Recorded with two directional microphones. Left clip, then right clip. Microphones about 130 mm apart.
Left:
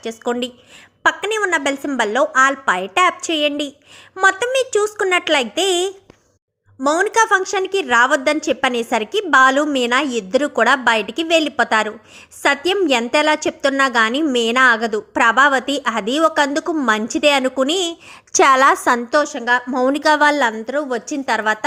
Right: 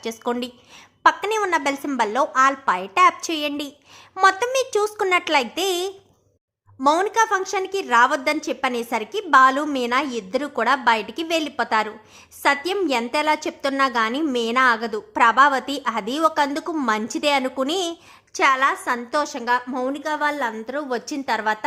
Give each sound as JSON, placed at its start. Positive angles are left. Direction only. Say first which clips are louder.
{"t": 0.0, "sound": "a woman's voice", "louder": "left 4 dB", "side_deg": 5}
{"t": 7.1, "sound": "a woman's voice", "louder": "left 5 dB", "side_deg": 25}
{"t": 18.3, "sound": "a woman's voice", "louder": "left 7 dB", "side_deg": 55}
{"t": 19.2, "sound": "a woman's voice", "louder": "left 4 dB", "side_deg": 10}
{"t": 19.7, "sound": "a woman's voice", "louder": "left 10 dB", "side_deg": 45}
{"t": 20.5, "sound": "a woman's voice", "louder": "left 5 dB", "side_deg": 15}